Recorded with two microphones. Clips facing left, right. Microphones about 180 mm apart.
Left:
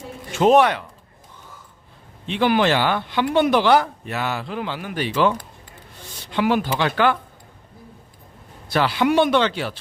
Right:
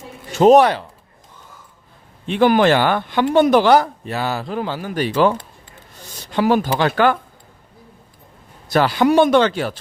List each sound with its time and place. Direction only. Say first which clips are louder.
0.3 s speech: right 4 dB; 40° right (ahead or behind)
2.2 s a man's voice: right 5 dB; 45° right (ahead or behind)
8.7 s speech: right 4 dB; 45° right (ahead or behind)